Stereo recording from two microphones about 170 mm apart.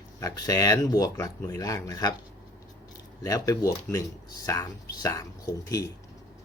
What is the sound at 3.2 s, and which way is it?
Speech, 20° left (ahead or behind).